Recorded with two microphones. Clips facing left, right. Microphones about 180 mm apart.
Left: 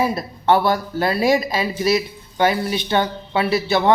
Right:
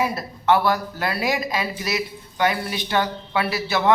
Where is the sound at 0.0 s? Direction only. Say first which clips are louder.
Left 3 dB; 30° left (ahead or behind).